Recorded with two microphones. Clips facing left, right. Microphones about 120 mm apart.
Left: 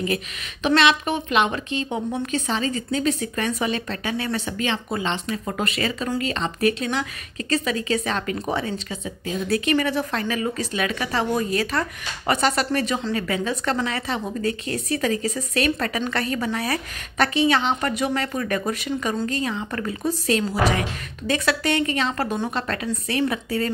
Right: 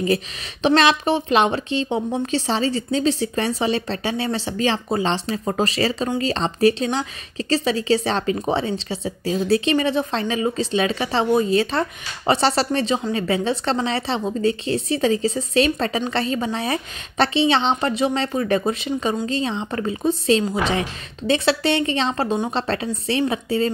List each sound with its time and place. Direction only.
0.0 s a woman's voice: 30° right (ahead or behind)